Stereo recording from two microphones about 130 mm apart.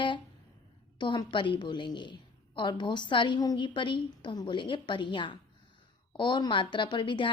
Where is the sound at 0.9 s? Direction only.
35° left (ahead or behind).